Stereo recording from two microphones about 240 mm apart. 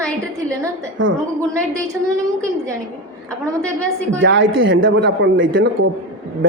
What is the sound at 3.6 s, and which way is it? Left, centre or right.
Speech, centre.